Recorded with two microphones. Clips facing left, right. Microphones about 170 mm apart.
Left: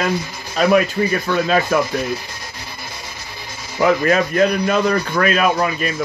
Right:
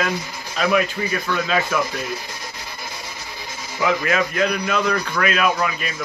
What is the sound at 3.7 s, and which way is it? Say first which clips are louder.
A man's voice: left 5 dB; 40° left (ahead or behind).